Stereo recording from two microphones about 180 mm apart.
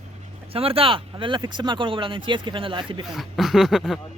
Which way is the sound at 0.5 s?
30° right (ahead or behind).